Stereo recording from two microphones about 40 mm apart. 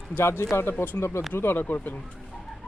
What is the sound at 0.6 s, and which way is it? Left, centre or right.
Speech, left.